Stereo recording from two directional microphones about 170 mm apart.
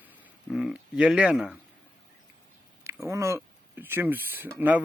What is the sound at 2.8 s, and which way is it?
Speech, 15° right (ahead or behind).